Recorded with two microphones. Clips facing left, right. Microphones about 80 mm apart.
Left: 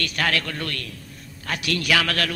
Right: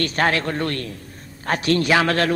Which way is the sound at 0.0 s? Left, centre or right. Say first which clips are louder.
Right 5 dB; right.